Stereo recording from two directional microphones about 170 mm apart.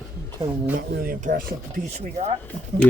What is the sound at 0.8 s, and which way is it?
Speech, 60° right (ahead or behind).